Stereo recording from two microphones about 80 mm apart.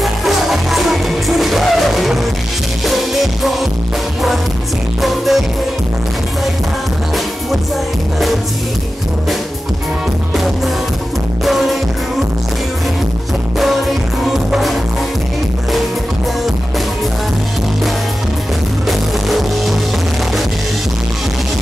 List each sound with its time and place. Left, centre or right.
0.0 s music: centre
5.0 s music: centre
11.4 s music: centre
14.2 s music: centre
18.9 s music: centre